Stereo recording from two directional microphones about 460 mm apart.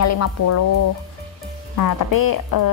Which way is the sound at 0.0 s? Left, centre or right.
Left.